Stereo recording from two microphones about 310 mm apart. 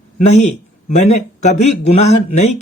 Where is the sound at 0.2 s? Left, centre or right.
Left.